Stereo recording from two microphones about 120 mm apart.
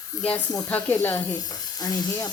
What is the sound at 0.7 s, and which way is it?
Speech, 15° left (ahead or behind).